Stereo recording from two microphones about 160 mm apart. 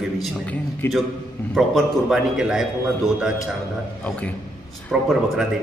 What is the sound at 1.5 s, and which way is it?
A man's voice, centre (ahead or behind).